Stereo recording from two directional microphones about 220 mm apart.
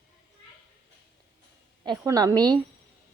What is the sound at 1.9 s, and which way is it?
Speech, 15° right (ahead or behind).